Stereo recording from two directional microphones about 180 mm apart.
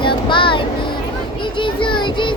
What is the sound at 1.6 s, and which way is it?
Child singing, 25° left (ahead or behind).